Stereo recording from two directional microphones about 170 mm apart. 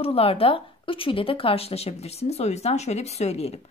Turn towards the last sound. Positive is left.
turn(degrees=40)  # may be behind; listen again after turning